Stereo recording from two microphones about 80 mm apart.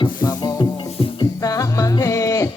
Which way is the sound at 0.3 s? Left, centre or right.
Left.